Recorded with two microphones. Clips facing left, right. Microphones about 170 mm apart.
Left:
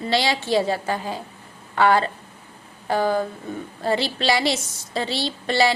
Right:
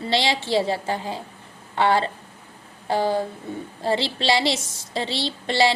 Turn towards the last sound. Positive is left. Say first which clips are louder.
# even
turn(degrees=-25)  # may be behind; listen again after turning